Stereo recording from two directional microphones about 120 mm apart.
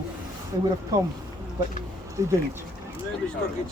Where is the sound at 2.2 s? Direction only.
25° right (ahead or behind).